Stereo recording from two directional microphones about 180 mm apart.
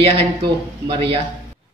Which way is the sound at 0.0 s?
30° right (ahead or behind).